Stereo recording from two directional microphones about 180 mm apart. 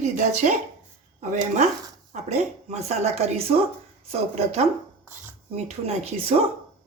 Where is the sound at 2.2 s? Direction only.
40° right (ahead or behind).